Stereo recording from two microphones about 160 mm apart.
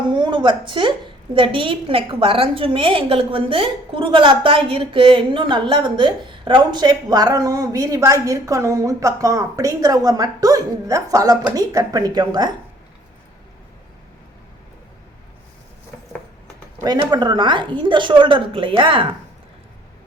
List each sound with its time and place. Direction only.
0.1 s a sound: 30° right (ahead or behind)
1.4 s a woman's voice: 30° right (ahead or behind)
16.8 s a woman's voice: 25° right (ahead or behind)